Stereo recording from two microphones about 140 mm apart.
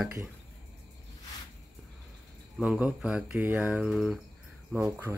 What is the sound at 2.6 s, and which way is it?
Speech, 5° right (ahead or behind).